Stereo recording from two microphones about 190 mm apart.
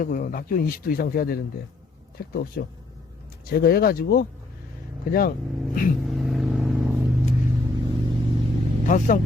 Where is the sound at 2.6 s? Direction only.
55° left (ahead or behind).